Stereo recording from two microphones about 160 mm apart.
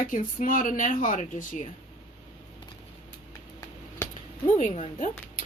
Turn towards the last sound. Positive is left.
turn(degrees=45)  # may be behind; listen again after turning